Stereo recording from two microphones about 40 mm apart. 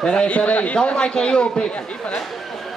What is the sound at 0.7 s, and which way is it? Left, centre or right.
A man's voice, left.